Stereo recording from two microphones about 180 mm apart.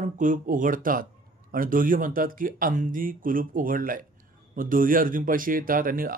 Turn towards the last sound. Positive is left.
turn(degrees=-50)  # may be behind; listen again after turning